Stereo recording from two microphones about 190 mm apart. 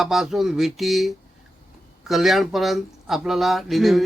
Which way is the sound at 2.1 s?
Centre (ahead or behind).